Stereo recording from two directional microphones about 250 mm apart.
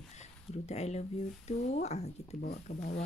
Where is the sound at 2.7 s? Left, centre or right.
Left.